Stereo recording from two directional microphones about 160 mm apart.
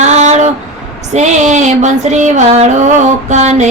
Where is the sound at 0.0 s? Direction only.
45° right (ahead or behind).